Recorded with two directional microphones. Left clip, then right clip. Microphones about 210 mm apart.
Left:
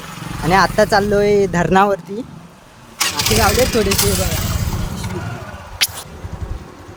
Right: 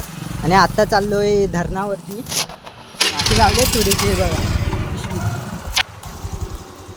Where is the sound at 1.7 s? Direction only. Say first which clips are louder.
Left 10 dB; 45° left (ahead or behind).